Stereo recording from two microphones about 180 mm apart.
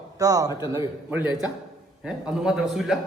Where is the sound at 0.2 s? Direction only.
20° right (ahead or behind).